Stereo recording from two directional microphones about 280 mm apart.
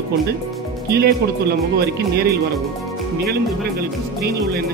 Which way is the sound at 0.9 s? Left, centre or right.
Right.